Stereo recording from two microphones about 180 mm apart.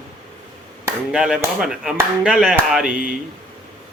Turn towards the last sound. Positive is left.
turn(degrees=-5)  # may be behind; listen again after turning